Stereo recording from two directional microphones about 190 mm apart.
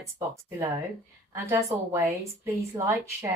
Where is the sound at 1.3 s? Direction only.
15° right (ahead or behind).